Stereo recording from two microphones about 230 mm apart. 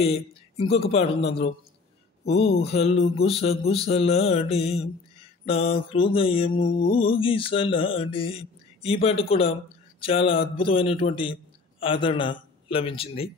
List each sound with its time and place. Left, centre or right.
0.0 s speech: left
2.2 s a man's voice: left